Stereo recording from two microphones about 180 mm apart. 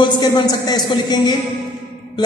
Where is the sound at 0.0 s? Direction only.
25° left (ahead or behind).